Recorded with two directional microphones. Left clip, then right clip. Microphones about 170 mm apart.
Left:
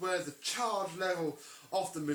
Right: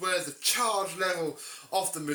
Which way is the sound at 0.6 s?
30° right (ahead or behind).